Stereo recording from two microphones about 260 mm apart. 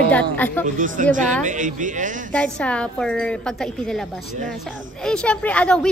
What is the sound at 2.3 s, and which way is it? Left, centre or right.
Speech, centre.